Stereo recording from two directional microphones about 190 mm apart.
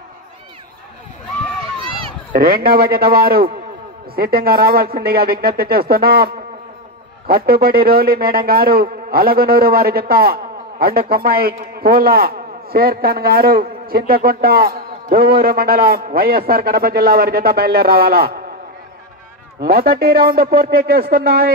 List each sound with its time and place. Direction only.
2.3 s a man's voice: 55° right (ahead or behind)
19.6 s a man's voice: 55° right (ahead or behind)